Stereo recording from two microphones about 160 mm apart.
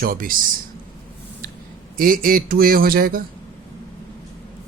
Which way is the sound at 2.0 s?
60° right (ahead or behind).